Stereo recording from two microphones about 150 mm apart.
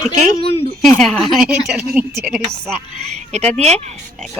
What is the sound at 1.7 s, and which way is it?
Speech, 10° right (ahead or behind).